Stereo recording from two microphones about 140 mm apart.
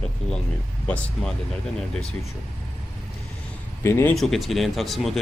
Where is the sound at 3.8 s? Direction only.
20° left (ahead or behind).